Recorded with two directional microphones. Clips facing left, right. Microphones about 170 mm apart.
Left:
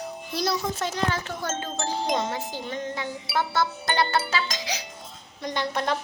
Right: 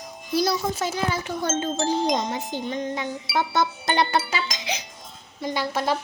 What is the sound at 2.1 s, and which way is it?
Wind chime, 20° right (ahead or behind).